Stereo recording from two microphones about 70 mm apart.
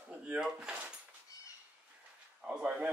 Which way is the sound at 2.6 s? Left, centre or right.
Right.